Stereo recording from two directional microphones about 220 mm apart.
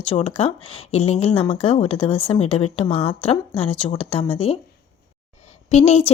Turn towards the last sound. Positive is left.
turn(degrees=30)  # may be behind; listen again after turning